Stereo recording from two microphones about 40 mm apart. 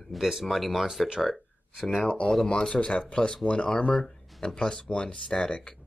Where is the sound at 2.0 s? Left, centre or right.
Left.